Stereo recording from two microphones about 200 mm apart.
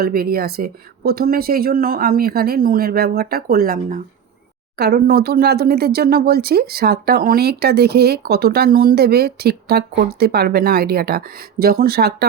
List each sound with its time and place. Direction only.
0.0 s speech: 50° right (ahead or behind)